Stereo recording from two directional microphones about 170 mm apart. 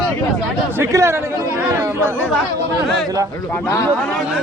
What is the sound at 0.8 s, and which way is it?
Speech, 15° right (ahead or behind).